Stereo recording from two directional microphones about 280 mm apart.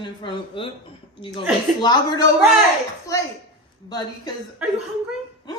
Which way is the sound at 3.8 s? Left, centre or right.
Centre.